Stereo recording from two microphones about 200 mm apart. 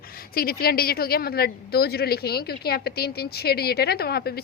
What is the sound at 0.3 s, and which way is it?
A woman's voice, 50° left (ahead or behind).